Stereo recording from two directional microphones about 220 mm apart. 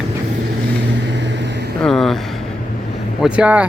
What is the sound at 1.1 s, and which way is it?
Vehicle, 55° right (ahead or behind).